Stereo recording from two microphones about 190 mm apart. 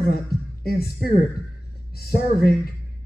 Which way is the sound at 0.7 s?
55° left (ahead or behind).